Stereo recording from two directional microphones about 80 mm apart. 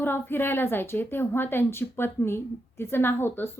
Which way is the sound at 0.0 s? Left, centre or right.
Left.